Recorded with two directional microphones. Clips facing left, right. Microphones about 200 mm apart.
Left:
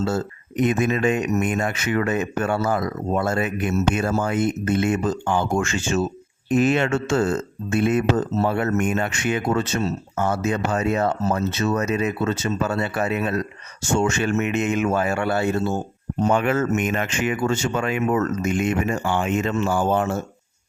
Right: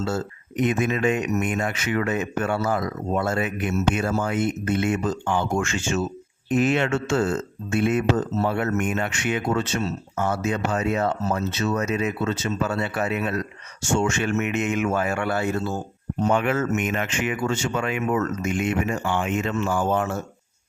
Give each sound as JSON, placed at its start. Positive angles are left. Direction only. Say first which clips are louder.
{"t": 0.0, "sound": "speech", "louder": "left 3 dB", "side_deg": 40}
{"t": 16.2, "sound": "speech", "louder": "left 2 dB", "side_deg": 40}